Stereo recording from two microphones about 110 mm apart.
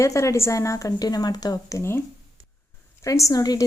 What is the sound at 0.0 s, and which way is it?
A woman's voice, 25° left (ahead or behind).